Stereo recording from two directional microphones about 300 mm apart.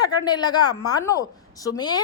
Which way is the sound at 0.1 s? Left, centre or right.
Centre.